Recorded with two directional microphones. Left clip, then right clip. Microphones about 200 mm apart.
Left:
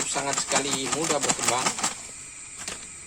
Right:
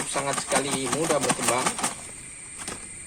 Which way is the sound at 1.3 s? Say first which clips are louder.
Right 1 dB; centre (ahead or behind).